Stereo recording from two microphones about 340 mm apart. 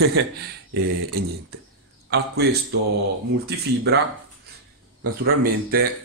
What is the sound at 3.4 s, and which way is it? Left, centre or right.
Speech, right.